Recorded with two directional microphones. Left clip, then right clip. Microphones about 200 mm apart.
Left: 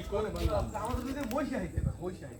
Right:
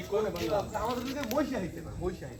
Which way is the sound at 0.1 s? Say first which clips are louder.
Right 3 dB; 35° right (ahead or behind).